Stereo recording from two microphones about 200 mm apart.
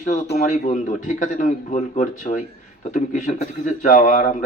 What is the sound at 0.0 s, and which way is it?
A man's voice, 35° left (ahead or behind).